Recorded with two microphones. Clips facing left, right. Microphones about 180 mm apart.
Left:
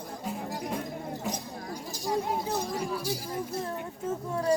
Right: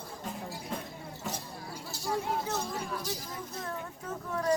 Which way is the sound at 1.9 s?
15° left (ahead or behind).